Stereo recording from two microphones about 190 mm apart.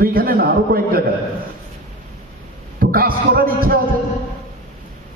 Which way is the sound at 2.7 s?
50° right (ahead or behind).